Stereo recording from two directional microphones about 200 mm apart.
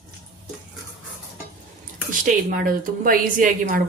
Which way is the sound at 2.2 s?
45° right (ahead or behind).